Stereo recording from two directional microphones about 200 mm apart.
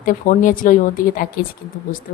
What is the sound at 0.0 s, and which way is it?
A woman's voice, 40° left (ahead or behind).